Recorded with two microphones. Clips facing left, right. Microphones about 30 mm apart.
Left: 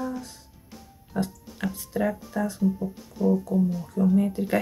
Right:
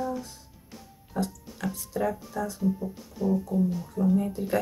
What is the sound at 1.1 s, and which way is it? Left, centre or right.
Speech, left.